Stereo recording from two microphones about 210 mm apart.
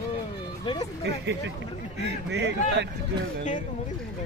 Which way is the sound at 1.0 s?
55° right (ahead or behind).